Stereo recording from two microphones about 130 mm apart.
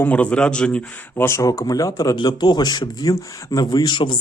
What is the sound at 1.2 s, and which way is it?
A man's voice, 25° left (ahead or behind).